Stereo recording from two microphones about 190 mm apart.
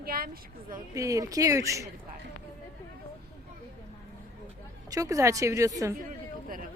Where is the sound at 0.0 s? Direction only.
50° right (ahead or behind).